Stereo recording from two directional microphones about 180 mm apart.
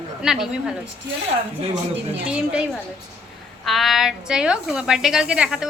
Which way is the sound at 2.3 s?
5° right (ahead or behind).